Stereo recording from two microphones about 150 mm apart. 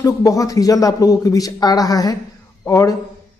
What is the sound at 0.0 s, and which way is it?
A man's voice, 20° left (ahead or behind).